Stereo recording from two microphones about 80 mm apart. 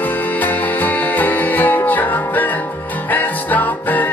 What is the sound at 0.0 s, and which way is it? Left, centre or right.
Music, left.